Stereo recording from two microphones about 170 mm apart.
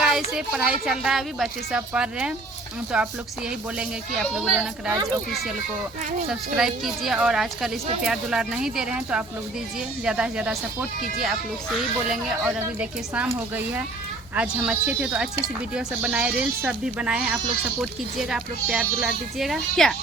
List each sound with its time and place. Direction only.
0.0 s a woman's voice: 5° right (ahead or behind)
4.9 s a child's voice: 20° right (ahead or behind)
6.6 s a woman's voice: centre (ahead or behind)
12.5 s speech: 10° right (ahead or behind)
14.3 s a woman's voice: 5° right (ahead or behind)